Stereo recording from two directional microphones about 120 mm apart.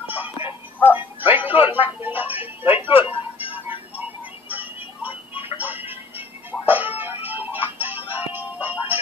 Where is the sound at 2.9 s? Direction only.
50° left (ahead or behind).